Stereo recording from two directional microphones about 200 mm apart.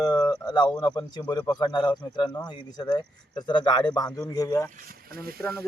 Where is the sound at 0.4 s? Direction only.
20° left (ahead or behind).